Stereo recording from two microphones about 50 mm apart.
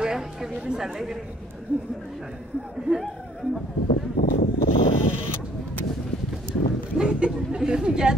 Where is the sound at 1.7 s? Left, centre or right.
Right.